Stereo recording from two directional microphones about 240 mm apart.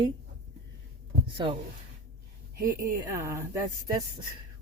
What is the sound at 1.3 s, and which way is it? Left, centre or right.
Speech, right.